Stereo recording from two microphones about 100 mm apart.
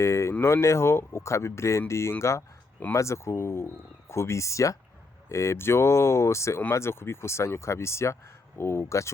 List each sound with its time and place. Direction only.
0.0 s speech: 30° left (ahead or behind)